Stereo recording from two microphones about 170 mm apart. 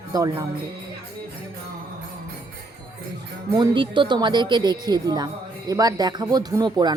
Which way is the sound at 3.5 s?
30° right (ahead or behind).